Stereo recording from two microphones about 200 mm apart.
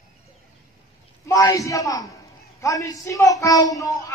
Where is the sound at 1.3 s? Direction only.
15° left (ahead or behind).